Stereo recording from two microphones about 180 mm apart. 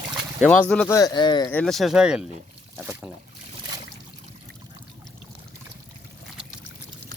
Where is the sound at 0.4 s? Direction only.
5° left (ahead or behind).